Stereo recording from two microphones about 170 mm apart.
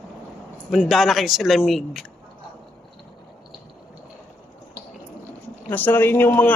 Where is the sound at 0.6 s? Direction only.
Centre (ahead or behind).